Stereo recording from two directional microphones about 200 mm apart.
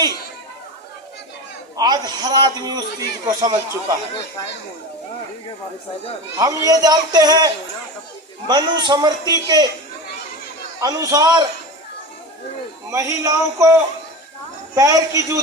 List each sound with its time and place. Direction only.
1.7 s a man's voice: 20° right (ahead or behind)
6.3 s a man's voice: 15° right (ahead or behind)
10.8 s a man's voice: 20° right (ahead or behind)
12.9 s speech: 15° right (ahead or behind)
14.8 s speech: 15° right (ahead or behind)